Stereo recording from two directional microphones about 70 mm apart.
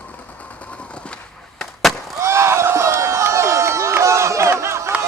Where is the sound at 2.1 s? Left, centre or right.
Right.